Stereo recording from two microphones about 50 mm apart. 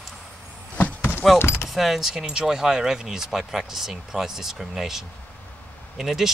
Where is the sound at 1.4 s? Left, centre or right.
Left.